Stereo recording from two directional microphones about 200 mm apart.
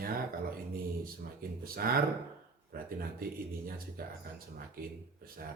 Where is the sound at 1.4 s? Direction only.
50° right (ahead or behind).